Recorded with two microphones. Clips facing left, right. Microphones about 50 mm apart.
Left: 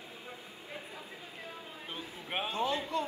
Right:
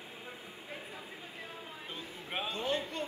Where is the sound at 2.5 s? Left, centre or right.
Left.